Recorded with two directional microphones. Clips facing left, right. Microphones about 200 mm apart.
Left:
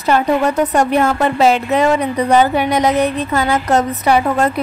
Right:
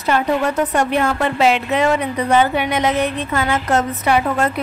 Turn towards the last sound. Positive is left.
turn(degrees=35)  # may be behind; listen again after turning